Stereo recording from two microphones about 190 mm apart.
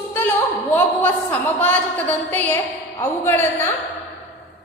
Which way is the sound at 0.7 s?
10° left (ahead or behind).